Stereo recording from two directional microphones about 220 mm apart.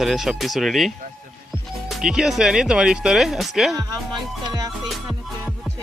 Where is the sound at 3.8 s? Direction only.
15° right (ahead or behind).